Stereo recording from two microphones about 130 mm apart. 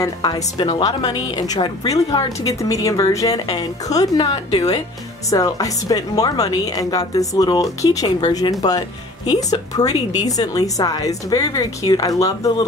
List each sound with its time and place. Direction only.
0.0 s a woman's voice: 35° left (ahead or behind)